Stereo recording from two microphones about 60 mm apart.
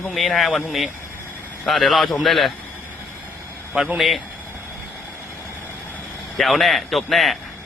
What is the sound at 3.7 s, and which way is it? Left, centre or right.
Speech, centre.